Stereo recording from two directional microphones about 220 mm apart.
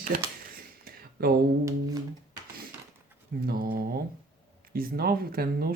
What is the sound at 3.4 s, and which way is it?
Speech, 45° right (ahead or behind).